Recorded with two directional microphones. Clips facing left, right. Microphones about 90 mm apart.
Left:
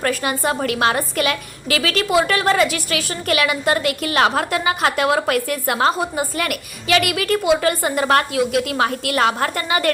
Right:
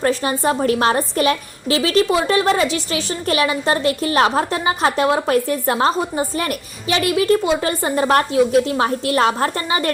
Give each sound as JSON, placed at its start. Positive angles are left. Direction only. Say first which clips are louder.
{"t": 0.0, "sound": "a woman's voice", "louder": "right 2 dB", "side_deg": -30}